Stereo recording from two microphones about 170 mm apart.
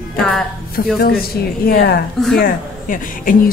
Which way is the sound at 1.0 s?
65° left (ahead or behind).